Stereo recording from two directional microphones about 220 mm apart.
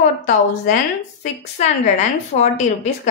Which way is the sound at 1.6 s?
30° left (ahead or behind).